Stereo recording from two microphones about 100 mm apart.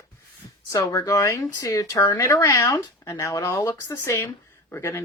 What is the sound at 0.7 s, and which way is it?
Speech, 35° left (ahead or behind).